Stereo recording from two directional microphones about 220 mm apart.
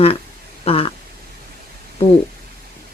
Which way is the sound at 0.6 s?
25° left (ahead or behind).